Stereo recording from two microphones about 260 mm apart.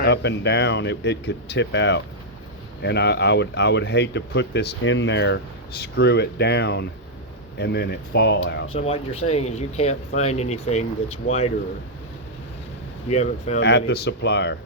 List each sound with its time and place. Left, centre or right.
0.0 s speech: left
8.7 s speech: left
13.1 s speech: left
13.6 s speech: left